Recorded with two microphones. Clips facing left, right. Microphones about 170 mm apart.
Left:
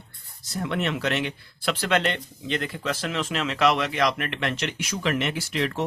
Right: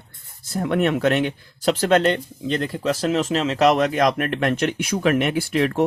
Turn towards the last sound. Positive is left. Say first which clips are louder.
# right 7 dB
turn(degrees=-50)  # may be behind; listen again after turning